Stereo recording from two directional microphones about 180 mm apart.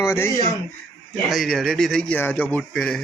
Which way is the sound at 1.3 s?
Centre (ahead or behind).